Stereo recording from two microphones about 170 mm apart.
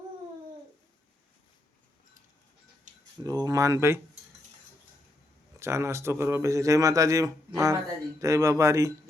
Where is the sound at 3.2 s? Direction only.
20° right (ahead or behind).